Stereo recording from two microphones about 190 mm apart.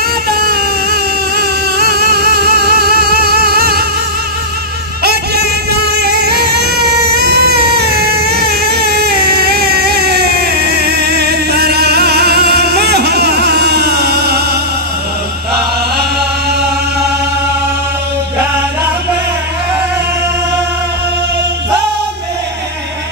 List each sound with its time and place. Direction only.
0.3 s music: 55° right (ahead or behind)
5.0 s a sound: 55° right (ahead or behind)
5.9 s music: 60° right (ahead or behind)